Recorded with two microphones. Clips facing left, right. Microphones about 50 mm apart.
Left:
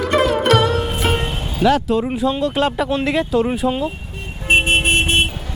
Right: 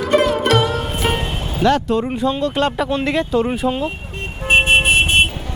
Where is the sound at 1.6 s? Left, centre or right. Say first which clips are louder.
Even; centre.